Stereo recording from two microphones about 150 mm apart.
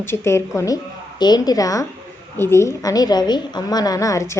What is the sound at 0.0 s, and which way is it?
A woman's voice, 15° left (ahead or behind).